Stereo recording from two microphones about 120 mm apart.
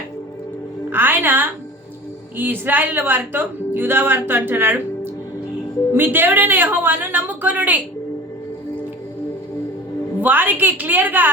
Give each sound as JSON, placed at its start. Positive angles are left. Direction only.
{"t": 0.9, "sound": "a woman's voice", "side_deg": -15}
{"t": 5.9, "sound": "speech", "side_deg": -15}
{"t": 10.2, "sound": "speech", "side_deg": -15}